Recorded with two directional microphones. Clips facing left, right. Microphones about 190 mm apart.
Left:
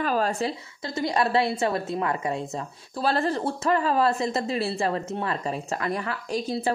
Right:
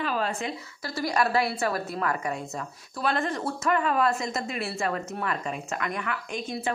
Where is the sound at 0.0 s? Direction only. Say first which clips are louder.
Left 4 dB; 40° left (ahead or behind).